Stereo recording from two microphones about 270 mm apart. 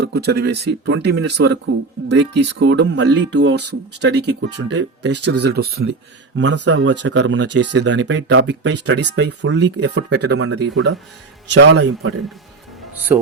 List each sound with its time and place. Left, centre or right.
0.0 s speech: right
12.9 s music: centre